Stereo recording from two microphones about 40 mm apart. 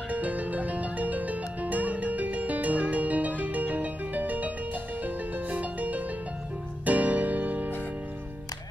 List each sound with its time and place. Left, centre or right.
0.1 s music: right